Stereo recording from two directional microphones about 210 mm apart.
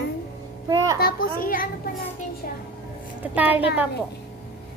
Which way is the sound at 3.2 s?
10° right (ahead or behind).